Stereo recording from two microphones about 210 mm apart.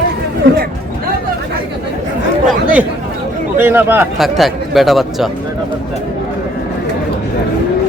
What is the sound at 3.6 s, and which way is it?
Speech, 10° right (ahead or behind).